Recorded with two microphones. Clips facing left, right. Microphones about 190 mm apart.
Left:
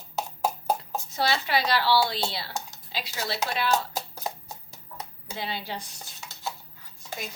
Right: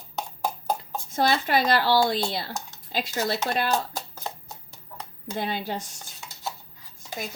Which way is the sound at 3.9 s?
10° left (ahead or behind).